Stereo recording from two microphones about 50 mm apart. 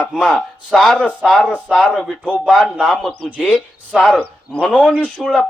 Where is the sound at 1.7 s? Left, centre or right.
Centre.